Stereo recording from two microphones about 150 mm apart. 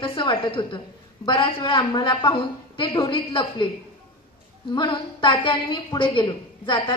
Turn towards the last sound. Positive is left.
turn(degrees=35)  # may be behind; listen again after turning